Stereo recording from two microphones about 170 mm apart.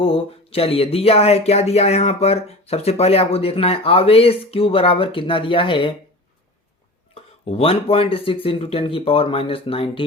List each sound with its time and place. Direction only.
0.0 s speech: 35° left (ahead or behind)
7.1 s speech: 35° left (ahead or behind)